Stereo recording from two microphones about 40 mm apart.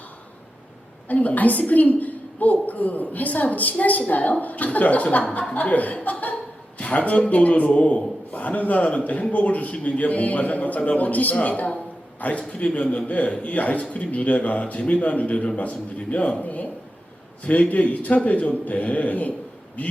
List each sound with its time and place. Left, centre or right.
1.0 s a woman's voice: left
16.4 s a sound: left
17.4 s a man's voice: left